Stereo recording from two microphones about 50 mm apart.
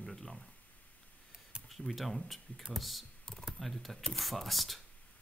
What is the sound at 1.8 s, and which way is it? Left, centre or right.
Speech, centre.